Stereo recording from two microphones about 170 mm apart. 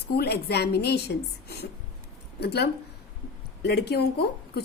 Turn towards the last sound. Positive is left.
turn(degrees=70)  # may be behind; listen again after turning